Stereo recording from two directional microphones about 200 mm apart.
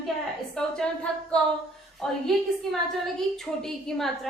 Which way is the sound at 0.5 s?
5° left (ahead or behind).